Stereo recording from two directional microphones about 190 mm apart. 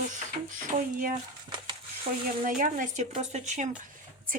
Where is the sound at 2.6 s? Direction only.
45° right (ahead or behind).